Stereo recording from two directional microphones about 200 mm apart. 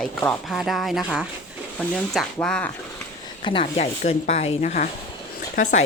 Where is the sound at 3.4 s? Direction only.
25° left (ahead or behind).